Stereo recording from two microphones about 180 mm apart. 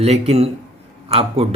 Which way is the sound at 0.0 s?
35° right (ahead or behind).